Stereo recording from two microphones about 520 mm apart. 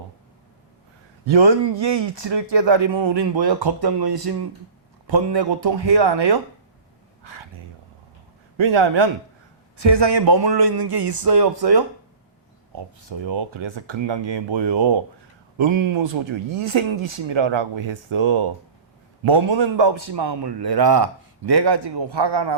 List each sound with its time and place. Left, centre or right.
1.3 s a man's voice: right
8.5 s a man's voice: right
12.7 s a man's voice: right